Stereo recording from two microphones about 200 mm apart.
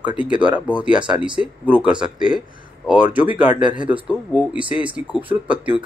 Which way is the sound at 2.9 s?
5° right (ahead or behind).